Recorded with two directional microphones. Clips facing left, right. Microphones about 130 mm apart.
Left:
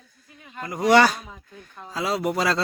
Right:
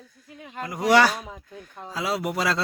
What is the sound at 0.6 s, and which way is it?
Speech, 5° right (ahead or behind).